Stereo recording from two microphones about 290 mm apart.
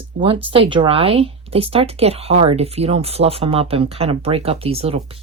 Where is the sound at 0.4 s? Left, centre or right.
Centre.